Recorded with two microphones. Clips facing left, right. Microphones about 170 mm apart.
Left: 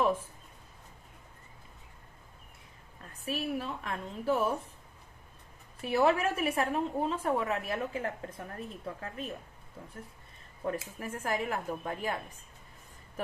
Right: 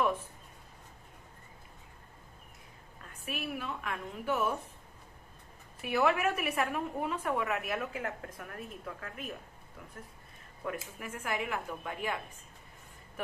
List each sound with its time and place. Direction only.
3.2 s a woman's voice: 35° left (ahead or behind)
5.8 s a woman's voice: 30° left (ahead or behind)
10.6 s a woman's voice: 35° left (ahead or behind)